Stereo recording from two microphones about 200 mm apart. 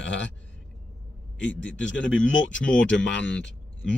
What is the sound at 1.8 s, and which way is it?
Speech, 65° left (ahead or behind).